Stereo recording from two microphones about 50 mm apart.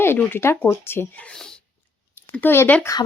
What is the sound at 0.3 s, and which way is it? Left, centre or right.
Speech, left.